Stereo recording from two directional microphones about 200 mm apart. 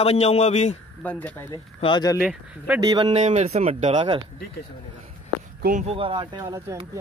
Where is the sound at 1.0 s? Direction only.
10° left (ahead or behind).